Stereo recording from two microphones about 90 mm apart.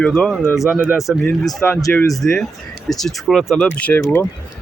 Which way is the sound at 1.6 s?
25° left (ahead or behind).